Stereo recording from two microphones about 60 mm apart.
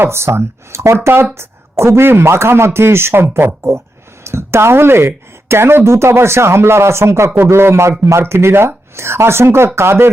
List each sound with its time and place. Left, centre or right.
0.0 s speech: right